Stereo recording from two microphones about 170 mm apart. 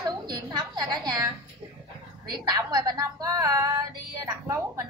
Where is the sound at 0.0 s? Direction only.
25° right (ahead or behind).